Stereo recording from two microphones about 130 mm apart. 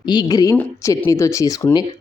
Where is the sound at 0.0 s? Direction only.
35° left (ahead or behind).